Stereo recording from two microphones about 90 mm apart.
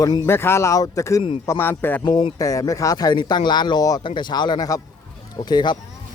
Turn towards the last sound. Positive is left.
turn(degrees=55)  # may be behind; listen again after turning